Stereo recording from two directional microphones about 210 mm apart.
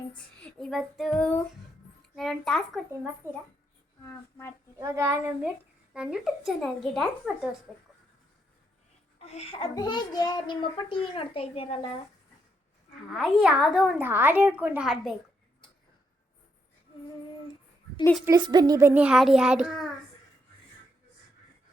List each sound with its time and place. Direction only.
0.4 s child singing: centre (ahead or behind)
2.1 s a woman's voice: centre (ahead or behind)
4.0 s speech: 10° left (ahead or behind)
4.8 s a woman's voice: 15° right (ahead or behind)
9.1 s a child's voice: 30° left (ahead or behind)
13.1 s a woman's voice: centre (ahead or behind)
18.3 s a woman's voice: 20° right (ahead or behind); by 19.9 s 5° right (ahead or behind)